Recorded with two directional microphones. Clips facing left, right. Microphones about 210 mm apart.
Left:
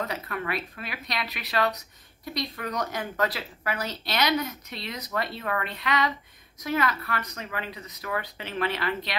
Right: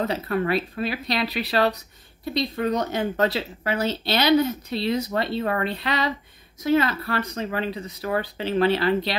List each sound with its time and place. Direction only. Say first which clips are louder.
0.0 s speech: right 8 dB; 30° right (ahead or behind)